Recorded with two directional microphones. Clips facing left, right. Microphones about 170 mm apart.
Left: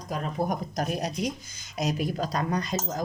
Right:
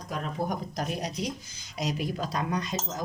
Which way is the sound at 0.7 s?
50° left (ahead or behind).